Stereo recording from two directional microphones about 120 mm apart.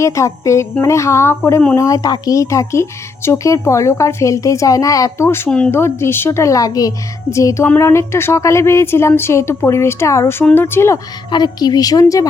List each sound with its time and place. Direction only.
0.0 s a woman's voice: 25° left (ahead or behind)
5.5 s speech: 10° left (ahead or behind)
5.7 s a woman's voice: 20° left (ahead or behind)
11.3 s a woman's voice: 35° left (ahead or behind)